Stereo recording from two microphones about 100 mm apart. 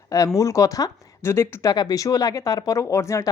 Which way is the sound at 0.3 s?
35° left (ahead or behind).